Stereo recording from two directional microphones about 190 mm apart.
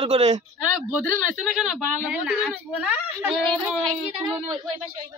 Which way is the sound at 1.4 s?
5° left (ahead or behind).